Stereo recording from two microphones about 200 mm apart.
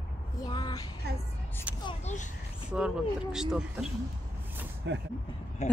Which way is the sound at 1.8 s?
35° left (ahead or behind).